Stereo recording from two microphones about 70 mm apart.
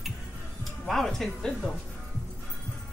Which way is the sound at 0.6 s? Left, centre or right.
Centre.